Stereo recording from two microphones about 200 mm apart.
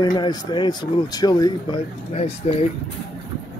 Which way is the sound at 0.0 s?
20° left (ahead or behind).